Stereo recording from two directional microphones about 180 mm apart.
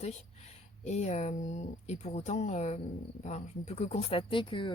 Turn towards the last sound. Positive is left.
turn(degrees=25)  # may be behind; listen again after turning